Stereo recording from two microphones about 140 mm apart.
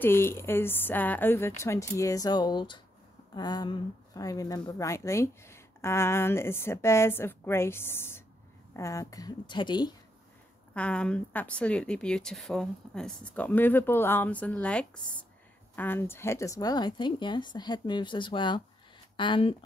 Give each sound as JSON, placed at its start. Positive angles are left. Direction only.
{"t": 0.0, "sound": "speech", "side_deg": 15}
{"t": 10.7, "sound": "speech", "side_deg": 10}